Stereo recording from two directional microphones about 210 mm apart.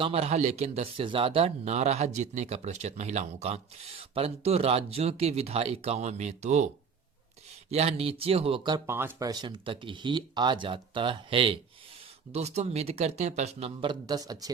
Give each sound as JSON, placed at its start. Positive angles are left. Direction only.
{"t": 0.0, "sound": "speech", "side_deg": -30}
{"t": 7.7, "sound": "speech", "side_deg": -30}